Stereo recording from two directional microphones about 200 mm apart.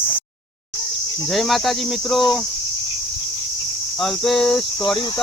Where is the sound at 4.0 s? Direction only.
Centre (ahead or behind).